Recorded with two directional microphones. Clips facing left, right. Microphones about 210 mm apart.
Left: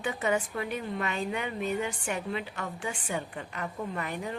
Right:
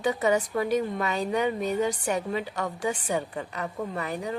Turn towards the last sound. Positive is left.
turn(degrees=-35)  # may be behind; listen again after turning